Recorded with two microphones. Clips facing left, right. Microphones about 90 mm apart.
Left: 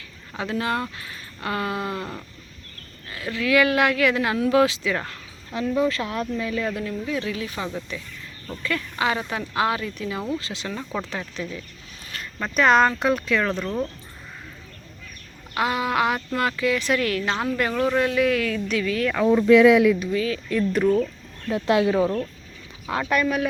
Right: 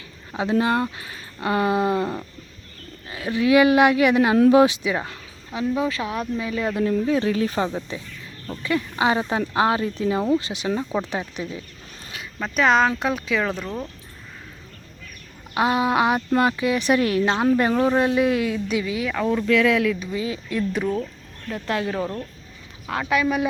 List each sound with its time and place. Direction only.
0.6 s speech: 25° right (ahead or behind)
6.7 s speech: 30° right (ahead or behind)
12.1 s speech: 5° right (ahead or behind)
15.5 s speech: 25° right (ahead or behind)
19.0 s speech: centre (ahead or behind)
19.3 s speech: 20° left (ahead or behind)
20.1 s speech: 20° right (ahead or behind)
20.5 s speech: 5° right (ahead or behind)
21.5 s speech: 15° left (ahead or behind)
22.9 s speech: centre (ahead or behind)